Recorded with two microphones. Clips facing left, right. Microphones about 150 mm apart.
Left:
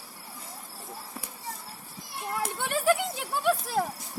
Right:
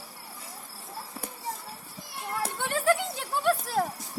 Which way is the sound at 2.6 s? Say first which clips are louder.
Even; 15° left (ahead or behind).